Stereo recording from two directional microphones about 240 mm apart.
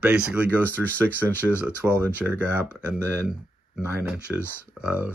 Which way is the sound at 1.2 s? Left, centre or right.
Centre.